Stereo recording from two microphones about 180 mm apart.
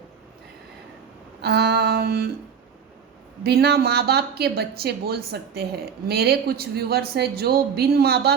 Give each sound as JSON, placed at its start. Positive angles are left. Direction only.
{"t": 1.4, "sound": "speech", "side_deg": -65}
{"t": 3.4, "sound": "speech", "side_deg": -60}